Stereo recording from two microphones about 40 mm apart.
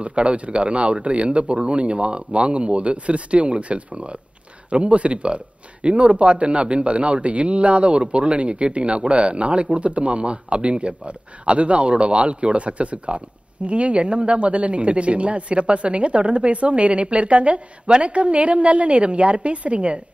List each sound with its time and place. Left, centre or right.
0.0 s speech: right